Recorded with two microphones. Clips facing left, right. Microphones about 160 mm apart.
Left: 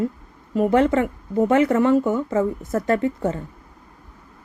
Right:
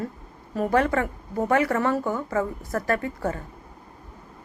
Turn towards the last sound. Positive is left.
turn(degrees=25)  # may be behind; listen again after turning